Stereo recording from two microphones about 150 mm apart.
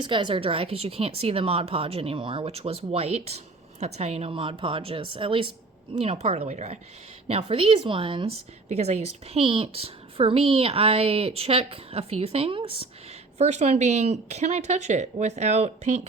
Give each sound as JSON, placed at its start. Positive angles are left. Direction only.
{"t": 0.0, "sound": "a woman's voice", "side_deg": -30}
{"t": 13.4, "sound": "speech", "side_deg": -50}